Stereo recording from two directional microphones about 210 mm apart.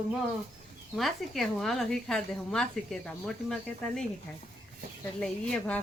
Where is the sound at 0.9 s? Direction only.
Centre (ahead or behind).